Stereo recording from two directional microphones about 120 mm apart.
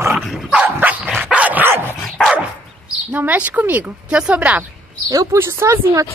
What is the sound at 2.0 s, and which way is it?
Dog, centre (ahead or behind).